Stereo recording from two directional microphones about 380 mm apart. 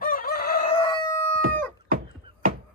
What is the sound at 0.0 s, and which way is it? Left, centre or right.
Crowing, left.